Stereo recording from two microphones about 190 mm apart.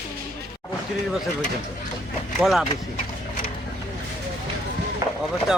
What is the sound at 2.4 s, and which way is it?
Speech, centre (ahead or behind).